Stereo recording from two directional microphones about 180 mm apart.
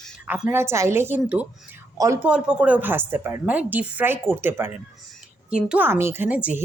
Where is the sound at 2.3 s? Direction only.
5° right (ahead or behind).